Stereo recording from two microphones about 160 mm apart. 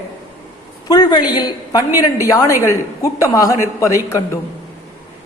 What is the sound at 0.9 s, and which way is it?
A woman's voice, 25° left (ahead or behind).